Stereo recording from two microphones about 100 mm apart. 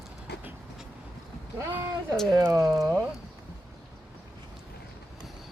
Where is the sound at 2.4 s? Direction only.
25° right (ahead or behind).